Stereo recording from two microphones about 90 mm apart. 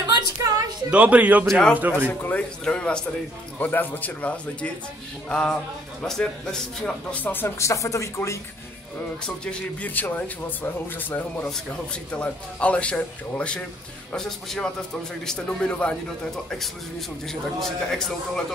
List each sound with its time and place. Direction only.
0.0 s a sound: 45° right (ahead or behind)
0.8 s speech: 15° right (ahead or behind)
1.5 s a man's voice: 10° left (ahead or behind)
1.8 s speech: 20° right (ahead or behind)
2.0 s a man's voice: 15° left (ahead or behind)
7.2 s speech: 20° left (ahead or behind)
9.2 s a man's voice: 10° left (ahead or behind)